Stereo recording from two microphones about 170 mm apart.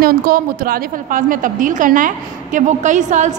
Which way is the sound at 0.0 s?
55° right (ahead or behind).